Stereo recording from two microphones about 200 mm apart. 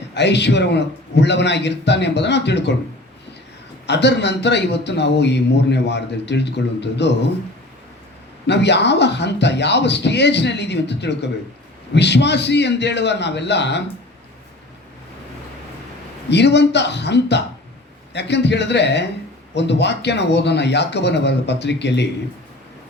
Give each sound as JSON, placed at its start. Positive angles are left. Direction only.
{"t": 0.1, "sound": "speech", "side_deg": 60}
{"t": 3.8, "sound": "speech", "side_deg": 60}
{"t": 8.4, "sound": "speech", "side_deg": 60}
{"t": 16.3, "sound": "speech", "side_deg": 60}